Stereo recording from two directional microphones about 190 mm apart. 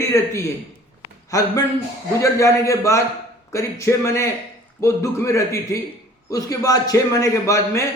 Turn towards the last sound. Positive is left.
turn(degrees=15)  # may be behind; listen again after turning